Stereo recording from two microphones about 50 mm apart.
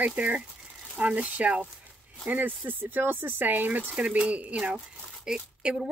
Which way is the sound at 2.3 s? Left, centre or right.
Right.